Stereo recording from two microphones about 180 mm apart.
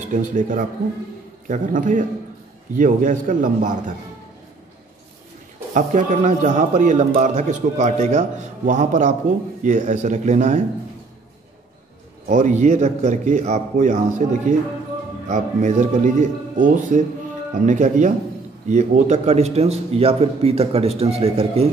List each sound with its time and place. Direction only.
0.1 s a man's voice: 45° right (ahead or behind)
5.8 s a man's voice: 45° right (ahead or behind)
12.3 s a man's voice: 45° right (ahead or behind)